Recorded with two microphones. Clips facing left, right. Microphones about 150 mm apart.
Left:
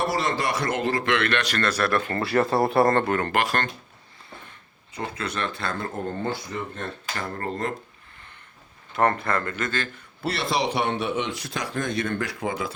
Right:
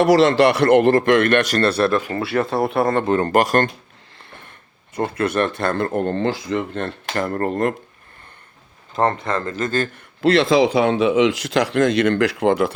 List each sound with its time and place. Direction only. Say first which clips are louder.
0.0 s speech: right 12 dB; 85° right; by 1.9 s 30° right (ahead or behind)
1.9 s speech: right 3 dB; 10° right (ahead or behind)
3.1 s speech: right 7 dB; 35° right (ahead or behind)
4.9 s speech: right 10 dB; 55° right (ahead or behind)
9.2 s speech: right 4 dB; 25° right (ahead or behind)
10.2 s speech: right 11 dB; 90° right; by 12.7 s 65° right (ahead or behind)